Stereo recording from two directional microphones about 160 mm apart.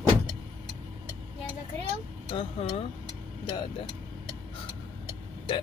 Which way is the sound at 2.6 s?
35° left (ahead or behind).